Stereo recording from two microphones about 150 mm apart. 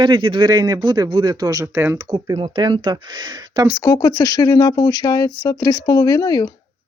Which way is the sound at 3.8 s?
20° left (ahead or behind).